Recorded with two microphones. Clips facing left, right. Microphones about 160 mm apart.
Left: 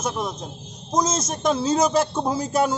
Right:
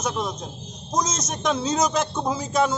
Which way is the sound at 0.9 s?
25° left (ahead or behind).